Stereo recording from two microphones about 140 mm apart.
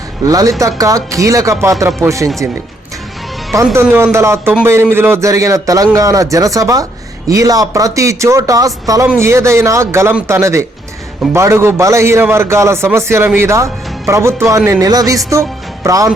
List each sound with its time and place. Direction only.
0.3 s a man's voice: 25° right (ahead or behind)
3.8 s a man's voice: 20° right (ahead or behind)